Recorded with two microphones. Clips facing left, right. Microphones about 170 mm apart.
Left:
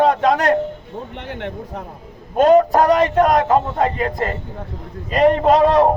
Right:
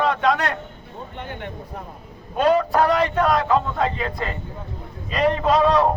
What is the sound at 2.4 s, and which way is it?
A man's voice, 45° left (ahead or behind).